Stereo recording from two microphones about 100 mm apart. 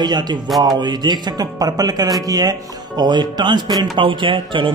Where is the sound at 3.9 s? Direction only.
55° right (ahead or behind).